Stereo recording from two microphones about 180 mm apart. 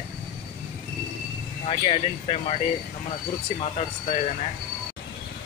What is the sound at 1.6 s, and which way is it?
Speech, 35° left (ahead or behind).